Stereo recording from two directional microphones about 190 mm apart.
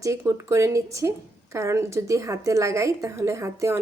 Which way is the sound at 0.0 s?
15° right (ahead or behind).